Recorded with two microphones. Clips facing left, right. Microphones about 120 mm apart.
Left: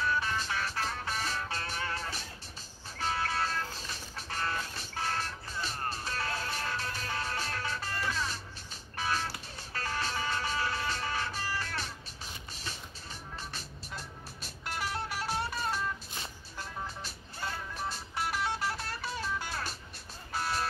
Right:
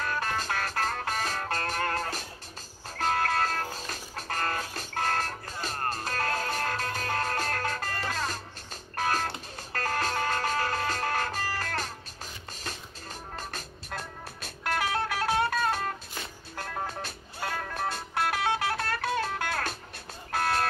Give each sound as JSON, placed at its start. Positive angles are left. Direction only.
{"t": 0.0, "sound": "music", "side_deg": -50}
{"t": 13.4, "sound": "music", "side_deg": -50}